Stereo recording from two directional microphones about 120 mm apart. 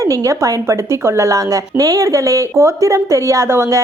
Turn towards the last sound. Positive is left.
turn(degrees=-25)  # may be behind; listen again after turning